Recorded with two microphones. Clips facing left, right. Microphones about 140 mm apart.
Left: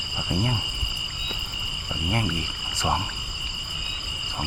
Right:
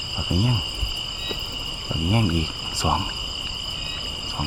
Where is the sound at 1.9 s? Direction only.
15° right (ahead or behind).